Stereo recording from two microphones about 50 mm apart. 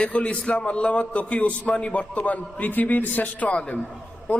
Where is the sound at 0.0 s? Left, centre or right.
Left.